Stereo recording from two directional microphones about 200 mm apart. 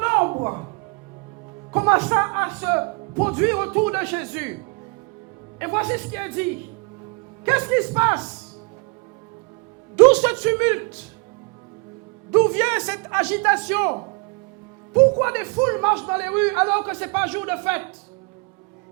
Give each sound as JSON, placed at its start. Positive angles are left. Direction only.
{"t": 0.0, "sound": "music", "side_deg": -10}
{"t": 0.3, "sound": "music", "side_deg": -20}
{"t": 1.7, "sound": "speech", "side_deg": -10}
{"t": 5.5, "sound": "speech", "side_deg": -10}
{"t": 10.0, "sound": "speech", "side_deg": -5}
{"t": 12.3, "sound": "speech", "side_deg": -10}
{"t": 15.2, "sound": "speech", "side_deg": -10}